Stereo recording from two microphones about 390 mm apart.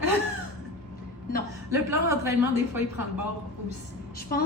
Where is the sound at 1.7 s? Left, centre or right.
Centre.